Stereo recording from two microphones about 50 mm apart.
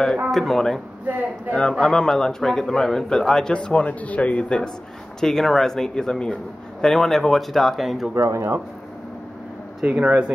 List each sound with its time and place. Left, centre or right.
0.3 s speech: centre
1.1 s speech: right
1.6 s speech: centre
3.5 s a man's voice: left
5.2 s speech: centre
8.3 s speech: right
10.0 s speech: right